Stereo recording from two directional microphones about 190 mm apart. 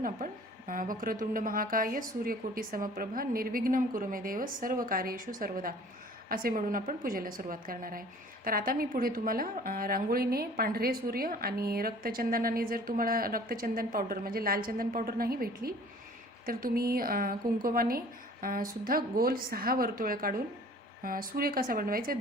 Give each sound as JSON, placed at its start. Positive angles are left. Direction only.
{"t": 0.2, "sound": "a woman's voice", "side_deg": -50}